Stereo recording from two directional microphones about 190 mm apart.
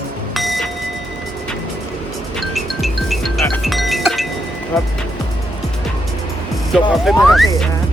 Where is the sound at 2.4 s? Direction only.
Centre (ahead or behind).